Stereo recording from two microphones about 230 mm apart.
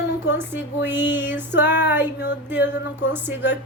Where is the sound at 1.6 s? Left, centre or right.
Centre.